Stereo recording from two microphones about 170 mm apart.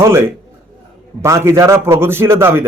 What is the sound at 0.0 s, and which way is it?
A man's voice, 15° right (ahead or behind).